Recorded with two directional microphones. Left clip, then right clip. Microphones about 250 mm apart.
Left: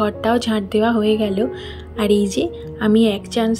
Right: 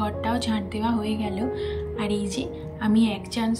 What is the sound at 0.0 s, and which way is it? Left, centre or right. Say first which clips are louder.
A woman's voice: left 8 dB; centre.